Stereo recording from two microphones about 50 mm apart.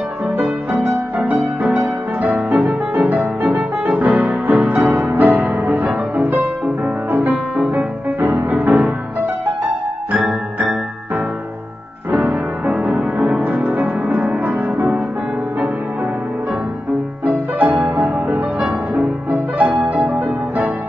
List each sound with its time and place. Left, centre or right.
0.7 s music: right
12.6 s music: right
17.7 s music: right
19.6 s music: right